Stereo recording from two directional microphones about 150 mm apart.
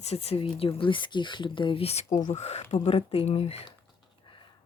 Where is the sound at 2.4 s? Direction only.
45° left (ahead or behind).